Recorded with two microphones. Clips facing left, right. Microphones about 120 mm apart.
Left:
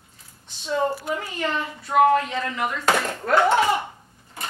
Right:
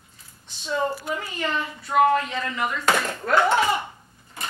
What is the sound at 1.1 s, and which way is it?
Speech, 45° left (ahead or behind).